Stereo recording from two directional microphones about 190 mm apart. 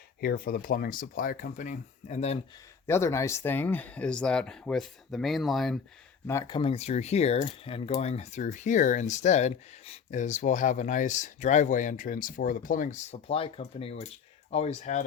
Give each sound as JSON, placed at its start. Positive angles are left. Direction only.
{"t": 0.2, "sound": "speech", "side_deg": 50}
{"t": 2.8, "sound": "speech", "side_deg": 15}
{"t": 6.2, "sound": "speech", "side_deg": 15}